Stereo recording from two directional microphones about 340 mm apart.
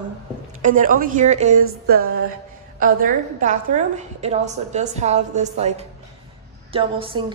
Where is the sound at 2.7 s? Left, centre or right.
Right.